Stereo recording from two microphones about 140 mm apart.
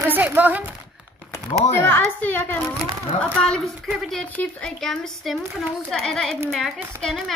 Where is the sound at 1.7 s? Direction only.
15° left (ahead or behind).